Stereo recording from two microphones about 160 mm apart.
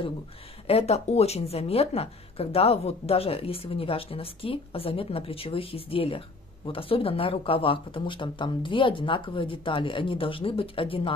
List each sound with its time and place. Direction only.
0.7 s speech: 40° left (ahead or behind)